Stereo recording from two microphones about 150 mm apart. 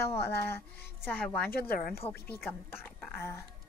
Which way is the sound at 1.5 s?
90° left.